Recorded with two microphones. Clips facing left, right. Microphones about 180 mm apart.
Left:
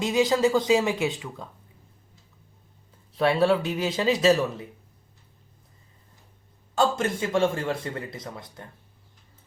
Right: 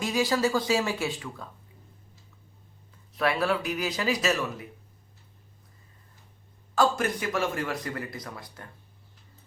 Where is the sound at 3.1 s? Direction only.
30° left (ahead or behind).